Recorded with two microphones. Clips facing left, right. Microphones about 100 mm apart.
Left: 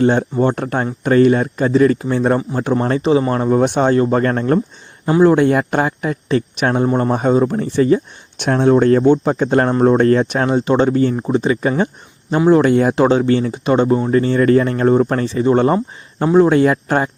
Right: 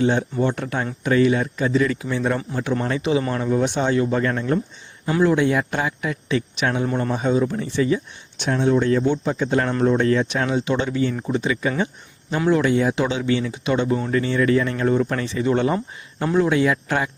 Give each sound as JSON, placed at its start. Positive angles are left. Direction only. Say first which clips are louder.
{"t": 0.0, "sound": "speech", "louder": "left 6 dB", "side_deg": 50}
{"t": 8.4, "sound": "speech", "louder": "left 6 dB", "side_deg": 55}
{"t": 12.7, "sound": "speech", "louder": "left 7 dB", "side_deg": 50}